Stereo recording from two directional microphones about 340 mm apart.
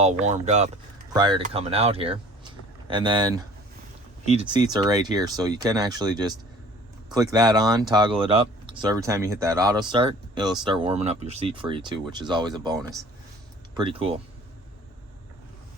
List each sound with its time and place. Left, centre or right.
0.0 s speech: centre